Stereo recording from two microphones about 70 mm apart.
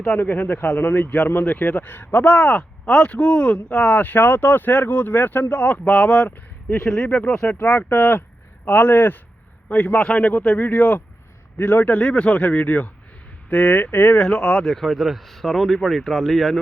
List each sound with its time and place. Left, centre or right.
0.0 s speech: centre
14.2 s speech: centre